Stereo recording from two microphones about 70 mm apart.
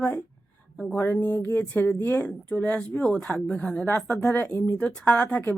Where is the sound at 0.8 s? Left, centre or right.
Left.